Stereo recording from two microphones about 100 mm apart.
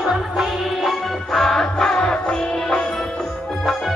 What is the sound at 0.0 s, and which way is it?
Music, 5° right (ahead or behind).